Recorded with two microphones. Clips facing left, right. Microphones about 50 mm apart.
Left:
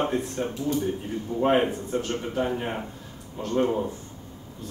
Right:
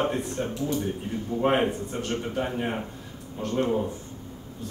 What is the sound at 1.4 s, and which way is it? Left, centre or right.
Speech, centre.